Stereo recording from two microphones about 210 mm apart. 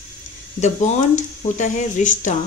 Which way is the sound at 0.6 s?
35° left (ahead or behind).